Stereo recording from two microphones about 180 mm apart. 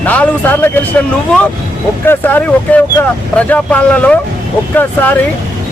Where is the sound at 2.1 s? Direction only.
10° left (ahead or behind).